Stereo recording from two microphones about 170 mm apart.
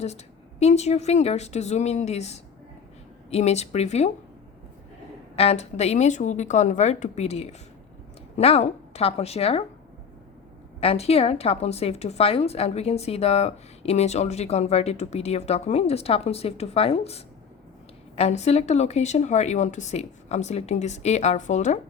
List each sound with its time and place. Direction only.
0.6 s a woman's voice: 40° left (ahead or behind)
5.4 s a woman's voice: 40° left (ahead or behind)
10.8 s a woman's voice: 35° left (ahead or behind)